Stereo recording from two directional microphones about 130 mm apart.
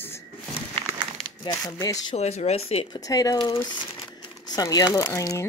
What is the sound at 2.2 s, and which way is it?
Speech, 55° left (ahead or behind).